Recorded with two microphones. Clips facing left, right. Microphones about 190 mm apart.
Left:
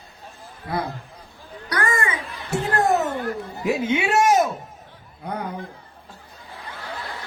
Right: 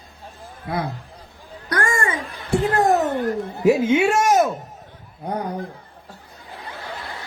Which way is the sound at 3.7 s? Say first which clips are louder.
Right 6 dB; 50° right (ahead or behind).